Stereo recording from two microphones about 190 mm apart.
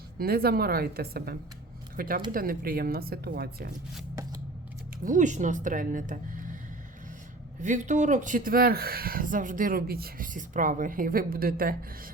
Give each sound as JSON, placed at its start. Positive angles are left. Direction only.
{"t": 0.2, "sound": "speech", "side_deg": -55}
{"t": 5.0, "sound": "speech", "side_deg": -40}
{"t": 7.6, "sound": "speech", "side_deg": -40}